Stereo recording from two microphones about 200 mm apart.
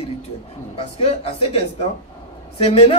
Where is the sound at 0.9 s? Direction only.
30° left (ahead or behind).